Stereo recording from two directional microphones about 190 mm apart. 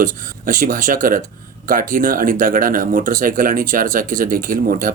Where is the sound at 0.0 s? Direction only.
45° right (ahead or behind).